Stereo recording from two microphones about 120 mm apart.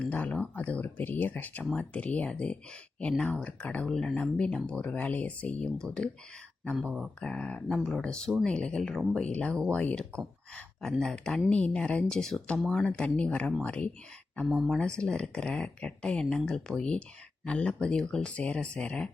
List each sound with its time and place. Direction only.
0.0 s speech: 10° left (ahead or behind)
6.8 s speech: 10° right (ahead or behind)
7.2 s speech: 10° left (ahead or behind)